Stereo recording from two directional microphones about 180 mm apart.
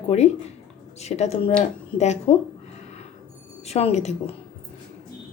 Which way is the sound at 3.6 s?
35° left (ahead or behind).